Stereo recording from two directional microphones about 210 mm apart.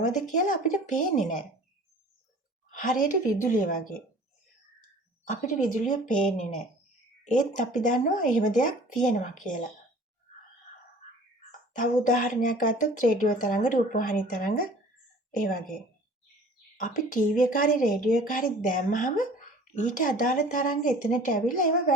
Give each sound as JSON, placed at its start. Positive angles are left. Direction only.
{"t": 0.1, "sound": "a woman's voice", "side_deg": 35}
{"t": 2.6, "sound": "a woman's voice", "side_deg": 40}
{"t": 5.3, "sound": "a woman's voice", "side_deg": 35}
{"t": 7.3, "sound": "a woman's voice", "side_deg": 35}
{"t": 11.8, "sound": "a woman's voice", "side_deg": 35}
{"t": 16.7, "sound": "a woman's voice", "side_deg": 40}